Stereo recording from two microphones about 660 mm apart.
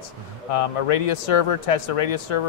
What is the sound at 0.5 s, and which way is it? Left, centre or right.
Speech, left.